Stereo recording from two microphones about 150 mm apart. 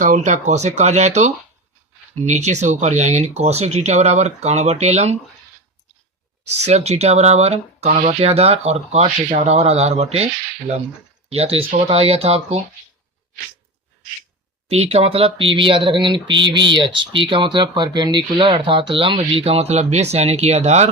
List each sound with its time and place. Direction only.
0.0 s speech: 55° right (ahead or behind)
6.7 s speech: 45° right (ahead or behind)
8.3 s speech: 40° right (ahead or behind)
11.3 s speech: 40° right (ahead or behind)
14.7 s speech: 45° right (ahead or behind)